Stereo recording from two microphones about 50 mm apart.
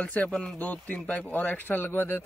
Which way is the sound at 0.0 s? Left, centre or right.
Left.